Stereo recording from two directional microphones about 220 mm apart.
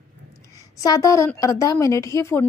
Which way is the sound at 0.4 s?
15° left (ahead or behind).